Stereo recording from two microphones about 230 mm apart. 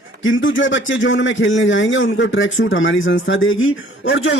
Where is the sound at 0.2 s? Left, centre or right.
Left.